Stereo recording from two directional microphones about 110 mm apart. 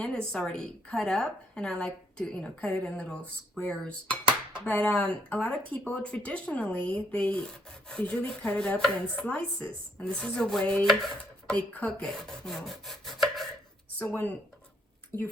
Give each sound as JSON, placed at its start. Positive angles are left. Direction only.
{"t": 0.0, "sound": "speech", "side_deg": 5}
{"t": 4.1, "sound": "dishes", "side_deg": -45}
{"t": 4.6, "sound": "speech", "side_deg": 10}
{"t": 14.0, "sound": "speech", "side_deg": 15}